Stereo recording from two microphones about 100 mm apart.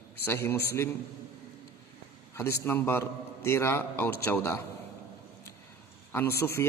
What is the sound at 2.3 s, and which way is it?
A man's voice, 25° left (ahead or behind).